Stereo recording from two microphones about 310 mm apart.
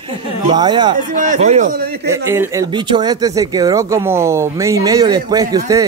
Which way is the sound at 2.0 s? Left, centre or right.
Centre.